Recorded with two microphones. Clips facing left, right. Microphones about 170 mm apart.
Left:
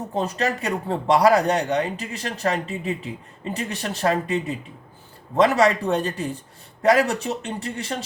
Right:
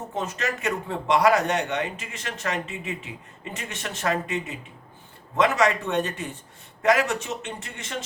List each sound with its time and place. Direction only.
0.1 s speech: 35° left (ahead or behind)